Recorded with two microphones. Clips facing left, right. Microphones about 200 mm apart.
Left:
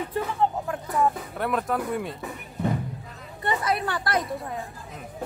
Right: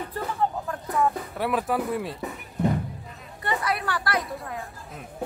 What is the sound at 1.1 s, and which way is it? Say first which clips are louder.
A woman's voice: right 1 dB; 5° right (ahead or behind).